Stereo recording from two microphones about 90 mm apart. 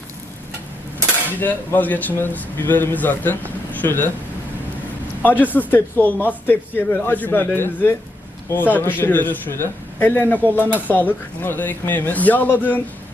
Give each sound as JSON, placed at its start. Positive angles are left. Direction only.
{"t": 1.4, "sound": "speech", "side_deg": 20}
{"t": 5.2, "sound": "a man's voice", "side_deg": 20}